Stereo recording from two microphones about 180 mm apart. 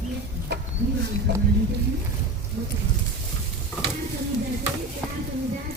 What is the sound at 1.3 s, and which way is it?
Speech, 65° right (ahead or behind).